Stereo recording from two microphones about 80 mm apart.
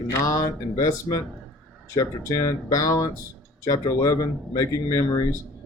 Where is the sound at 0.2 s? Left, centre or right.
Left.